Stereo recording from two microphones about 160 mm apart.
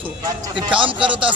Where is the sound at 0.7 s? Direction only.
30° right (ahead or behind).